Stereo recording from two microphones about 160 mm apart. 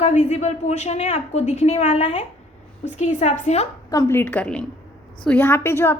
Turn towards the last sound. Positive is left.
turn(degrees=15)  # may be behind; listen again after turning